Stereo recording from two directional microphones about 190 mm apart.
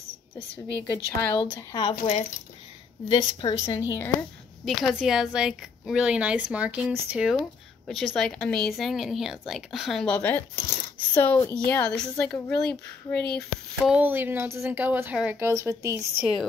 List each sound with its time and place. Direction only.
0.7 s a woman's voice: 10° left (ahead or behind)
1.4 s a woman's voice: 25° left (ahead or behind)
3.1 s a woman's voice: 25° left (ahead or behind)
4.6 s a woman's voice: centre (ahead or behind)